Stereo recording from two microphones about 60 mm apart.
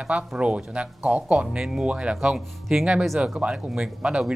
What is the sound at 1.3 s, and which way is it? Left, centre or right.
Speech, centre.